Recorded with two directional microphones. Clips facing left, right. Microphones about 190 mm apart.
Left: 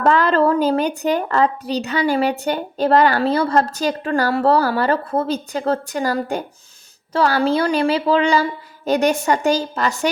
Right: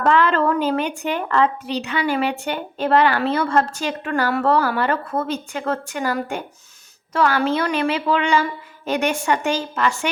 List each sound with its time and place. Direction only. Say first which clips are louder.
0.0 s a woman's voice: left 2 dB; 40° left (ahead or behind)